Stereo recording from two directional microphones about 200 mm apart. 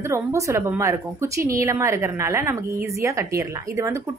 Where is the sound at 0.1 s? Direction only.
15° right (ahead or behind).